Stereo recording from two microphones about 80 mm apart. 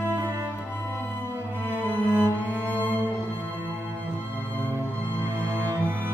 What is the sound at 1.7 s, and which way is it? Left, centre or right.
Music, right.